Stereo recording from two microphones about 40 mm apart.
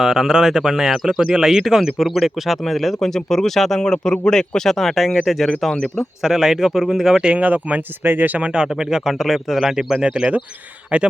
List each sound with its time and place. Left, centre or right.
0.0 s speech: centre
3.8 s a man's voice: left
4.3 s speech: centre
6.2 s speech: centre
7.3 s speech: right
8.0 s speech: right
8.4 s speech: right
8.6 s speech: centre
10.1 s speech: right